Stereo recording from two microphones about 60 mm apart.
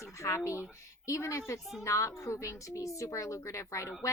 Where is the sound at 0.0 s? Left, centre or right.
Left.